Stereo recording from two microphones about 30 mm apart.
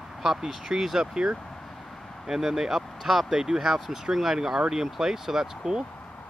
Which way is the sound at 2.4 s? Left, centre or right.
Centre.